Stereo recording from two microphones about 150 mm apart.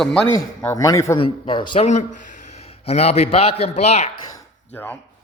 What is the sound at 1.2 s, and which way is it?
Speech, 30° left (ahead or behind).